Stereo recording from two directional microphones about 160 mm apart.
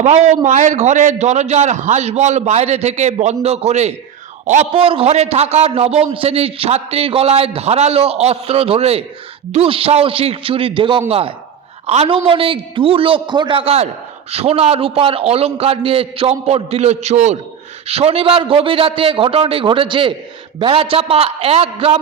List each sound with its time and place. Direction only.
0.0 s a man's voice: 45° right (ahead or behind)